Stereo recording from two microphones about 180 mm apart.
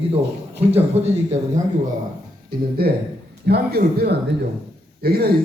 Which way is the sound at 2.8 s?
60° right (ahead or behind).